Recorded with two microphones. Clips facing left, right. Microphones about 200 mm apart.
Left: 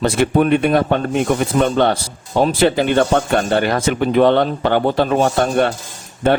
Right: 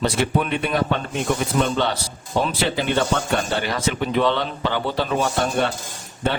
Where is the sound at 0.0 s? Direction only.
50° left (ahead or behind).